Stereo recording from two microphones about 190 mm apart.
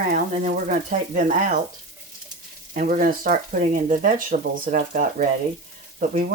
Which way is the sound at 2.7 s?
45° right (ahead or behind).